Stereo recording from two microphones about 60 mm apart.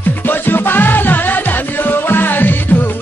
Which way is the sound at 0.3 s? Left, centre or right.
Left.